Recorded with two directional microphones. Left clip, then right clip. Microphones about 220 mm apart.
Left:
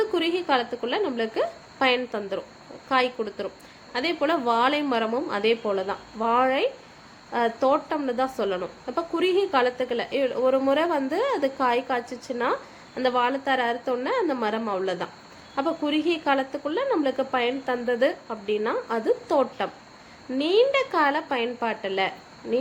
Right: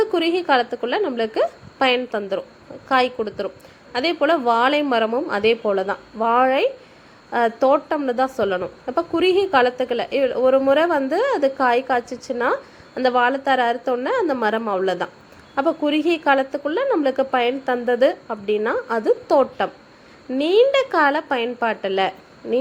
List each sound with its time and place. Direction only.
0.0 s a woman's voice: 15° right (ahead or behind)